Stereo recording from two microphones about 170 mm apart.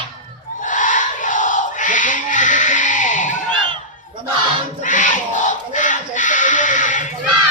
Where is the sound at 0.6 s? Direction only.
50° left (ahead or behind).